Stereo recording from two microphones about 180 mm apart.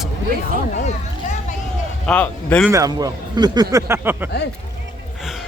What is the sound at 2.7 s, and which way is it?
Speech, 20° right (ahead or behind).